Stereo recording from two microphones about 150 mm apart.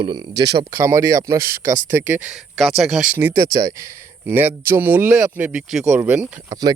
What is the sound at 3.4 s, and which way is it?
Speech, 25° right (ahead or behind).